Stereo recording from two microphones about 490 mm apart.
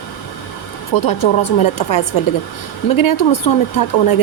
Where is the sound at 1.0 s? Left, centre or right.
Left.